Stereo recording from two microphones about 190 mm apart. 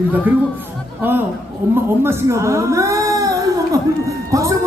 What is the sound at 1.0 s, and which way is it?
Speech, 10° right (ahead or behind).